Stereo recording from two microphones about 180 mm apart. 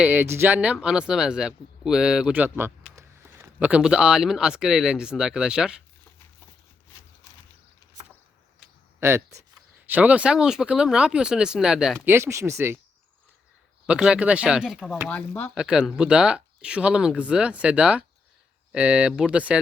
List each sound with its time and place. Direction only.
0.0 s speech: 10° right (ahead or behind)
9.0 s speech: 15° right (ahead or behind)
11.9 s speech: 15° right (ahead or behind)
13.8 s speech: 5° right (ahead or behind)
15.1 s speech: 10° left (ahead or behind)
15.5 s speech: 5° right (ahead or behind)